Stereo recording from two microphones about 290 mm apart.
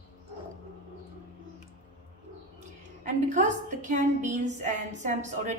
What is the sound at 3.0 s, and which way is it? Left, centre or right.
A woman's voice, right.